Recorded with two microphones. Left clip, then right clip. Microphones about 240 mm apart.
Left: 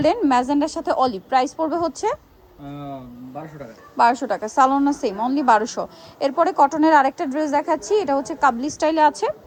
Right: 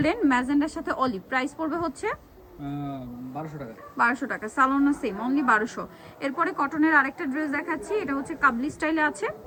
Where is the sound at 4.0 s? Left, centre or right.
Centre.